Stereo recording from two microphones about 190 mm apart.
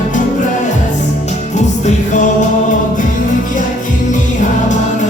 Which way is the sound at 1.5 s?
40° left (ahead or behind).